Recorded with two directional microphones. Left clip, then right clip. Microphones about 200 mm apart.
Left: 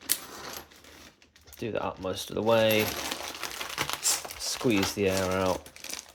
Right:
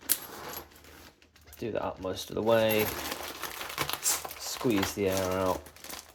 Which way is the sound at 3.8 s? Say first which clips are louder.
Left 2 dB; 15° left (ahead or behind).